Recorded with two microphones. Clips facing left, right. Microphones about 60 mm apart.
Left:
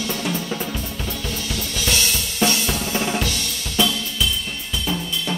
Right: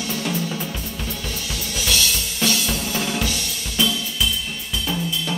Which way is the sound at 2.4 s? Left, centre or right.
Left.